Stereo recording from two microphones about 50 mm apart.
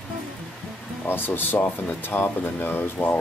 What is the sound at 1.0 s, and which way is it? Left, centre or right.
Speech, left.